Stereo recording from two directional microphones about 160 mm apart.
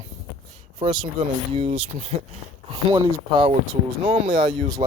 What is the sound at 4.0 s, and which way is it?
Speech, 35° right (ahead or behind).